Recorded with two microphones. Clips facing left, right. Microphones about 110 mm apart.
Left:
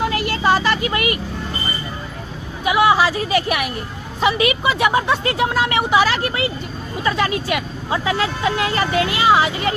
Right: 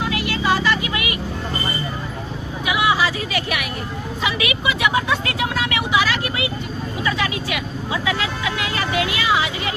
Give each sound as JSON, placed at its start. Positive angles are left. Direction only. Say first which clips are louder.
{"t": 0.0, "sound": "vehicle", "louder": "left 3 dB", "side_deg": 45}
{"t": 2.6, "sound": "vehicle", "louder": "left 5 dB", "side_deg": 40}
{"t": 4.2, "sound": "speech", "louder": "left 7 dB", "side_deg": 40}